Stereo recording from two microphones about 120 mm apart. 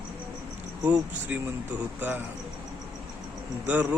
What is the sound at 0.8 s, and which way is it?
Speech, 15° right (ahead or behind).